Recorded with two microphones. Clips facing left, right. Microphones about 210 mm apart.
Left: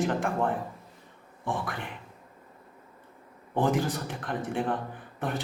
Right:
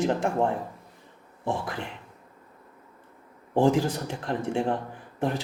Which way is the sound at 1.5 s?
25° right (ahead or behind).